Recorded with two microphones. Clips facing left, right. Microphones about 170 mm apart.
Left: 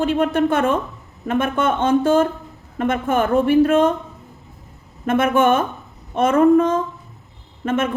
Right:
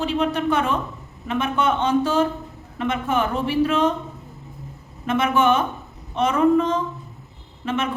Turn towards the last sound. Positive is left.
turn(degrees=50)  # may be behind; listen again after turning